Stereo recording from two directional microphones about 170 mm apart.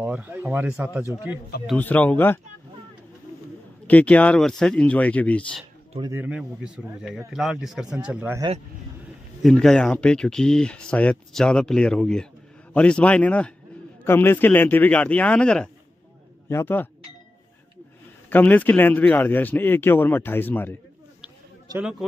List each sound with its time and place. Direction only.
0.0 s speech: 10° right (ahead or behind)
1.8 s a man's voice: 10° left (ahead or behind)
3.8 s a man's voice: 10° left (ahead or behind)
6.1 s speech: 5° right (ahead or behind)
9.4 s a man's voice: centre (ahead or behind)
18.3 s a man's voice: 10° left (ahead or behind)
21.7 s a man's voice: 20° right (ahead or behind)